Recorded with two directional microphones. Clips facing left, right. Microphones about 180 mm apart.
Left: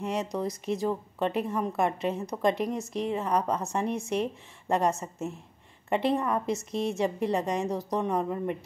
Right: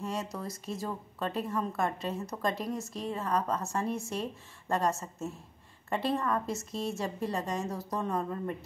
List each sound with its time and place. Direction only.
0.0 s a woman's voice: 20° left (ahead or behind)